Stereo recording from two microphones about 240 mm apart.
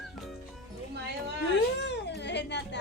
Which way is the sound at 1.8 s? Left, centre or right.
Left.